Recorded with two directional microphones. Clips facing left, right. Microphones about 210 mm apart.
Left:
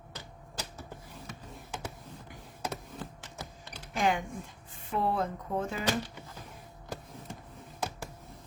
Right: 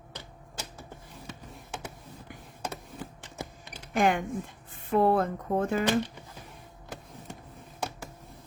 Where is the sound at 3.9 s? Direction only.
55° right (ahead or behind).